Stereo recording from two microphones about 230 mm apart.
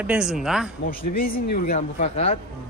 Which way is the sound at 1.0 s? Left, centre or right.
Left.